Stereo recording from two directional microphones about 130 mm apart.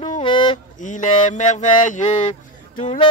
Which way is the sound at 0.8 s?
70° left (ahead or behind).